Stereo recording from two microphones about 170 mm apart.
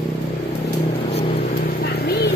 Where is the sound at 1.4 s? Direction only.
70° left (ahead or behind).